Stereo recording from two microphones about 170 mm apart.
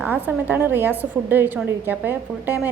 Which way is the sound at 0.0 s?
10° right (ahead or behind).